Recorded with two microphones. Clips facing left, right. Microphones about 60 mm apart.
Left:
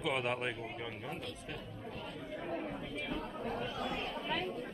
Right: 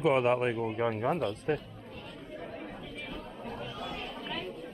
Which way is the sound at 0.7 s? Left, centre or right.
Right.